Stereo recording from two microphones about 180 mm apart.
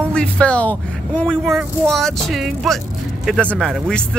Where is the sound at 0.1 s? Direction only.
5° left (ahead or behind).